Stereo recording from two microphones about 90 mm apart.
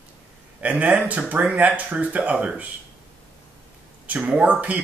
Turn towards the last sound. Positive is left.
turn(degrees=-15)  # may be behind; listen again after turning